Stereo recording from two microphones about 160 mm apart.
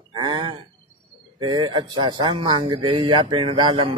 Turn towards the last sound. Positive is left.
turn(degrees=-30)  # may be behind; listen again after turning